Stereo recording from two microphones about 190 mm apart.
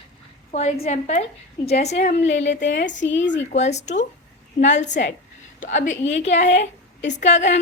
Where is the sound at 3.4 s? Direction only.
35° left (ahead or behind).